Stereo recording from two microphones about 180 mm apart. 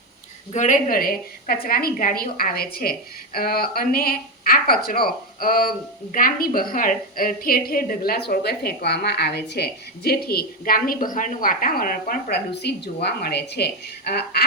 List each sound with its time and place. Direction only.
0.5 s a woman's voice: 45° left (ahead or behind); by 14.4 s 60° left (ahead or behind)